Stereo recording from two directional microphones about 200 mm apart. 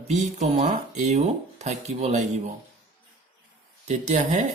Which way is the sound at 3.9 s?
35° right (ahead or behind).